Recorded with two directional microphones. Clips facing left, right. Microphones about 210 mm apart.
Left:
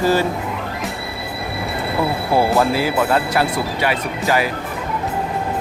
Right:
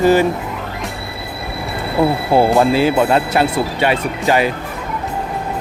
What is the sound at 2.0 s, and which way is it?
Speech, 25° right (ahead or behind).